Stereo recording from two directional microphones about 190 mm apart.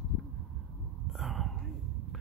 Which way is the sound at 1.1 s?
Centre (ahead or behind).